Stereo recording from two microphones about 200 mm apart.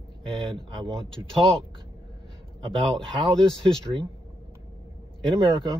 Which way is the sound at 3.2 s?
25° right (ahead or behind).